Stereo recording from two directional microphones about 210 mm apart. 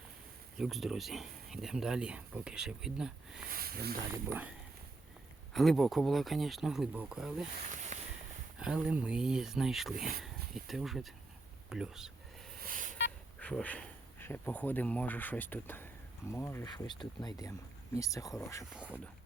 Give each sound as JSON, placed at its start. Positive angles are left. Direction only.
{"t": 0.6, "sound": "speech", "side_deg": 0}
{"t": 3.5, "sound": "speech", "side_deg": -45}
{"t": 4.1, "sound": "speech", "side_deg": -10}
{"t": 5.5, "sound": "speech", "side_deg": 0}
{"t": 7.9, "sound": "a sound", "side_deg": -35}
{"t": 8.5, "sound": "speech", "side_deg": -5}
{"t": 12.6, "sound": "telephone dialing", "side_deg": -40}
{"t": 13.4, "sound": "speech", "side_deg": 5}
{"t": 18.7, "sound": "speech", "side_deg": -5}